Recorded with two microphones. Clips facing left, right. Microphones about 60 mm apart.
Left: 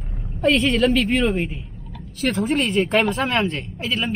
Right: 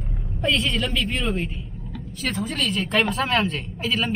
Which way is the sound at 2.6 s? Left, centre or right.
Left.